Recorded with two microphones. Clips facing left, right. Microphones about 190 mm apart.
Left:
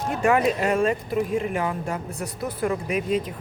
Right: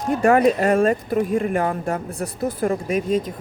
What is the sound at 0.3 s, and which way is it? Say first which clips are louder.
Speech: right 5 dB; 45° right (ahead or behind).